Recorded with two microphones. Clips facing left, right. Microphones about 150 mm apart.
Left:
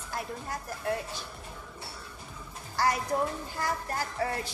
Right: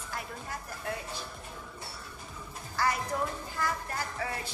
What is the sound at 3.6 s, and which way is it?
Speech, 40° left (ahead or behind).